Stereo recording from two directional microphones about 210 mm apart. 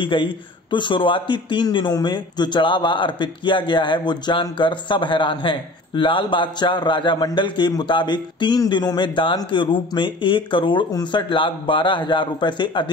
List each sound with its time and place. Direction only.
0.0 s a man's voice: 25° left (ahead or behind)